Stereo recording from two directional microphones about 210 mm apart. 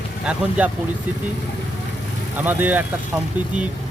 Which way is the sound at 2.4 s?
10° right (ahead or behind).